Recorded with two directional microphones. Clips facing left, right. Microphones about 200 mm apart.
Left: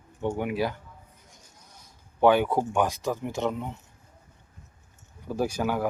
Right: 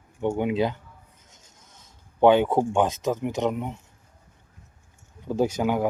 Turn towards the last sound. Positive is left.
turn(degrees=-20)  # may be behind; listen again after turning